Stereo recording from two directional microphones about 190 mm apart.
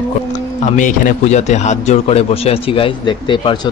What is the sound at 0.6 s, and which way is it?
Speech, 40° left (ahead or behind).